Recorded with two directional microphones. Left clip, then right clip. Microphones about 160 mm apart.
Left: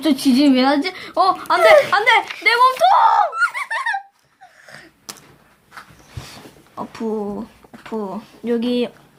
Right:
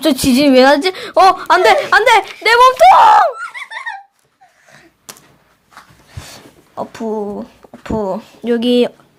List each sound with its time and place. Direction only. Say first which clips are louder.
0.0 s a woman's voice: right 4 dB; 55° right (ahead or behind)
3.4 s a sound: left 6 dB; 50° left (ahead or behind)
6.7 s a woman's voice: right 4 dB; 45° right (ahead or behind)
7.9 s speech: right 8 dB; 55° right (ahead or behind)